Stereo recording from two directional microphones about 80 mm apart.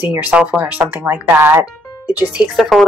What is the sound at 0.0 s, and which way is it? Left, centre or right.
Speech, right.